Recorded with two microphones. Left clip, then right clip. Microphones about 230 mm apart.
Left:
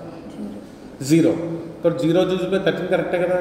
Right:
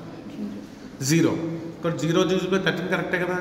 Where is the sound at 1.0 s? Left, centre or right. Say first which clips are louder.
Left 5 dB; right.